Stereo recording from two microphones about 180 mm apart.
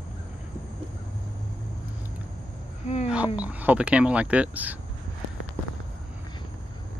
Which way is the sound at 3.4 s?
10° right (ahead or behind).